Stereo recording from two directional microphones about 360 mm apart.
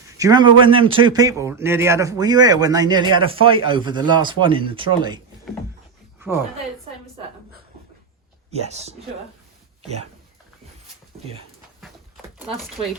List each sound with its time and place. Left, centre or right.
0.1 s a man's voice: centre
6.1 s a sound: centre
8.4 s a man's voice: centre